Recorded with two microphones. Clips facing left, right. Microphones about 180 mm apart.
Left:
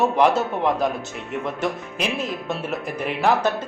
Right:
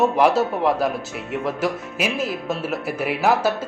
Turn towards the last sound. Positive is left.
turn(degrees=-5)  # may be behind; listen again after turning